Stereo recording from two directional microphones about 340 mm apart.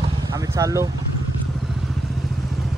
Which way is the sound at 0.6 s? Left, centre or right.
Centre.